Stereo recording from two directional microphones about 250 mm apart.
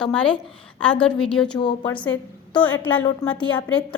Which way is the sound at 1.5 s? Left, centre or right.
Centre.